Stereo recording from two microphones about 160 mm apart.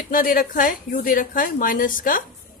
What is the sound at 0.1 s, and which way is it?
A woman's voice, 60° left (ahead or behind).